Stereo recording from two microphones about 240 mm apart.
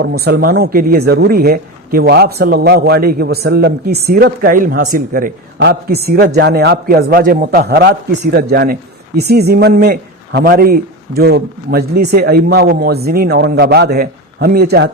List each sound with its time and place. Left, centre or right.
0.0 s speech: right